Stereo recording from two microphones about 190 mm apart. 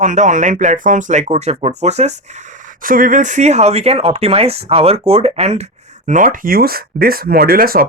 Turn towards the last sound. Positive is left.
turn(degrees=-50)  # may be behind; listen again after turning